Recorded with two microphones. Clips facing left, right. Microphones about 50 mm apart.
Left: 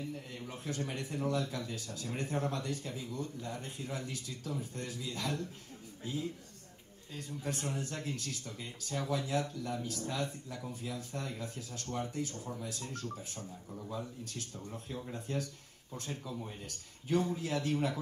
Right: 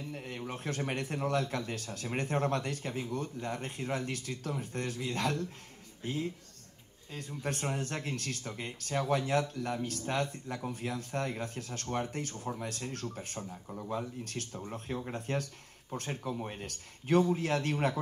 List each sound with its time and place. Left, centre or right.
0.1 s speech: right